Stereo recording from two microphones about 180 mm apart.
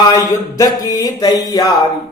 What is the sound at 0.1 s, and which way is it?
Speech, 20° left (ahead or behind).